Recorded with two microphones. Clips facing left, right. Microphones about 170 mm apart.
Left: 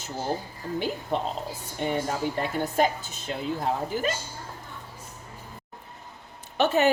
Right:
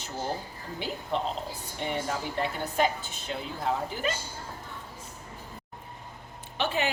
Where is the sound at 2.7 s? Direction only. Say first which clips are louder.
Left 2 dB; 45° left (ahead or behind).